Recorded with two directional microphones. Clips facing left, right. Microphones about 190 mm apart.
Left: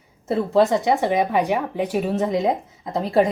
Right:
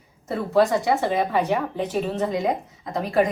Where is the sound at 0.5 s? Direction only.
25° left (ahead or behind).